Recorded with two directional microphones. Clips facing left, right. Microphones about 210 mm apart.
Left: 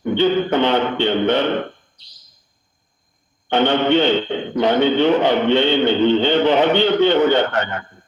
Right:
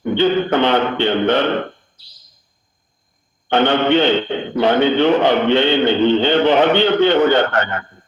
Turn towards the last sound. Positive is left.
turn(degrees=-60)  # may be behind; listen again after turning